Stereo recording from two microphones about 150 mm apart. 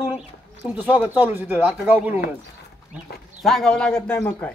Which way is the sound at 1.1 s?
10° right (ahead or behind).